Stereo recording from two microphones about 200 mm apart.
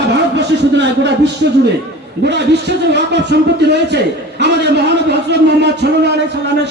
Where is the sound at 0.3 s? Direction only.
60° right (ahead or behind).